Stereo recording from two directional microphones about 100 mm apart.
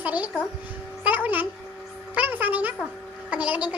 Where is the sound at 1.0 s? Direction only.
15° right (ahead or behind).